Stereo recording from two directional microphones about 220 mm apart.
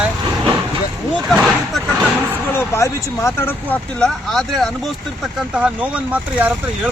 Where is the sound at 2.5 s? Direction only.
10° left (ahead or behind).